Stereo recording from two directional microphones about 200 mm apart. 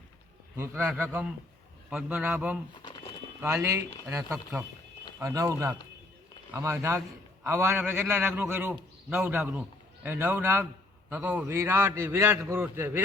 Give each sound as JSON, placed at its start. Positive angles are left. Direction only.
{"t": 0.5, "sound": "a man's voice", "side_deg": -10}